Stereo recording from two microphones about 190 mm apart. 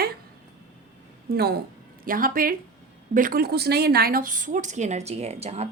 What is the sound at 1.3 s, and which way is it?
A woman's voice, 55° right (ahead or behind).